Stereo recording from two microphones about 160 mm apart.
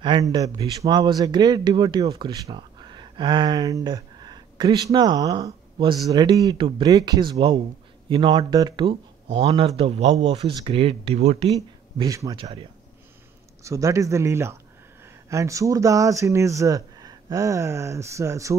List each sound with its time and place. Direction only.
0.0 s speech: 30° right (ahead or behind)
11.5 s speech: 20° right (ahead or behind)
12.4 s speech: 35° right (ahead or behind)
13.7 s speech: 20° right (ahead or behind)